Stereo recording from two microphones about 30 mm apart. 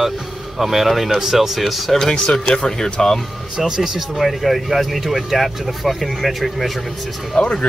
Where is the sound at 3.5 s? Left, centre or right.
Right.